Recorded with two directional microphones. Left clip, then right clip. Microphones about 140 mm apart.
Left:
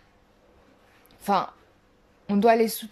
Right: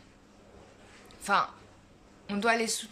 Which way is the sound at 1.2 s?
40° left (ahead or behind).